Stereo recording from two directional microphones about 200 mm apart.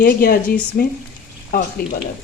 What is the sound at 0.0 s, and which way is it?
Speech, 50° left (ahead or behind).